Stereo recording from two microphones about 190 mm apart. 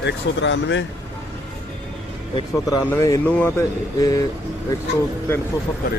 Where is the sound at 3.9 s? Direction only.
20° left (ahead or behind).